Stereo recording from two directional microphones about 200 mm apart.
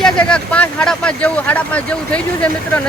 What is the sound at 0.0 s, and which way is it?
Speech, 5° left (ahead or behind).